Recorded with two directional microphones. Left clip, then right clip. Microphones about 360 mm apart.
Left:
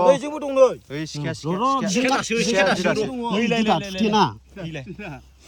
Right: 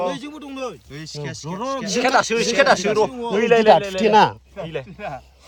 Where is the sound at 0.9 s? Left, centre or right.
Centre.